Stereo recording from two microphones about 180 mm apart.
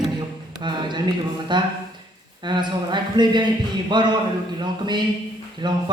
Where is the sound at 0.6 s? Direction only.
25° right (ahead or behind).